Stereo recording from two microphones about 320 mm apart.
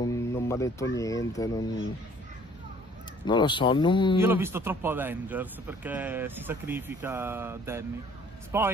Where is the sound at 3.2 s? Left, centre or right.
Centre.